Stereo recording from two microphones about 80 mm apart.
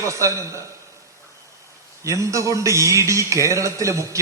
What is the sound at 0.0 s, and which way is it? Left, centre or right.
Speech, right.